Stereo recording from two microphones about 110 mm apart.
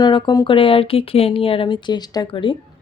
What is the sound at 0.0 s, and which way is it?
Speech, 40° left (ahead or behind).